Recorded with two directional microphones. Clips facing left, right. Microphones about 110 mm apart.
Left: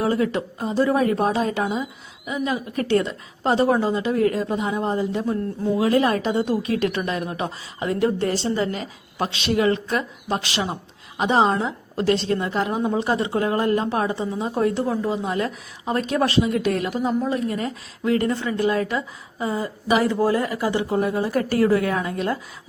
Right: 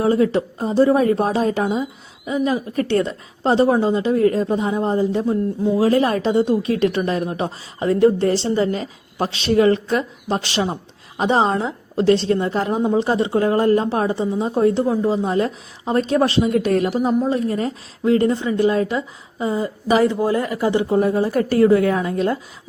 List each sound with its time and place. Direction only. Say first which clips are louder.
0.0 s a woman's voice: right 5 dB; 30° right (ahead or behind)